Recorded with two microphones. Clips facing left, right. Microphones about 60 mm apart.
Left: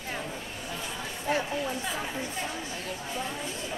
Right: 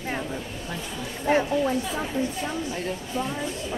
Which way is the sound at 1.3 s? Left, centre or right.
Right.